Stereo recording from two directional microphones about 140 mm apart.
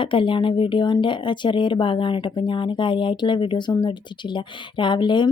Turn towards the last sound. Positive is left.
turn(degrees=35)  # may be behind; listen again after turning